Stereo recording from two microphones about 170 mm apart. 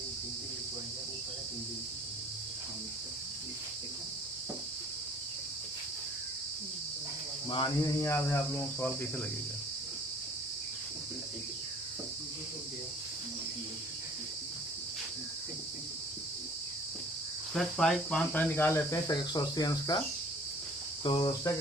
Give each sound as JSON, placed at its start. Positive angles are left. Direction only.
{"t": 7.5, "sound": "cricket", "side_deg": 20}
{"t": 17.5, "sound": "cricket", "side_deg": 5}
{"t": 21.0, "sound": "cricket", "side_deg": 25}